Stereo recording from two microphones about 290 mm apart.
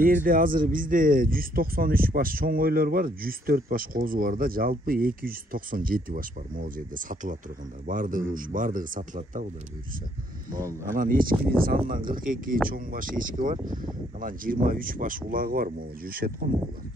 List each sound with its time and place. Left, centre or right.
0.0 s speech: right
11.0 s speech: right